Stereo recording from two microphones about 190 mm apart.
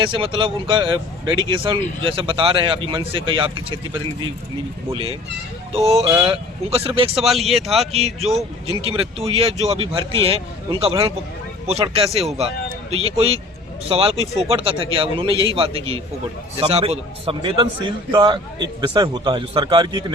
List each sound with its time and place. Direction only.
0.0 s a man's voice: 25° right (ahead or behind)
5.7 s a man's voice: 30° right (ahead or behind)
7.2 s speech: centre (ahead or behind)
7.9 s a man's voice: 30° right (ahead or behind)